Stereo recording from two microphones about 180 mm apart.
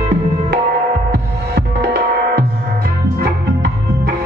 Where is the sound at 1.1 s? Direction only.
60° right (ahead or behind).